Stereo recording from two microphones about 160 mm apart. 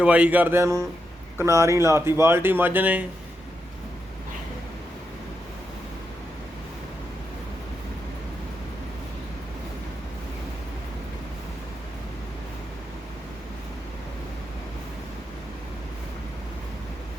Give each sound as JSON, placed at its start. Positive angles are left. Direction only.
{"t": 0.0, "sound": "speech", "side_deg": -10}